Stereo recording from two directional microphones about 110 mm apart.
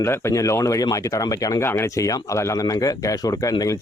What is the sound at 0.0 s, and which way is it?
Speech, 25° left (ahead or behind).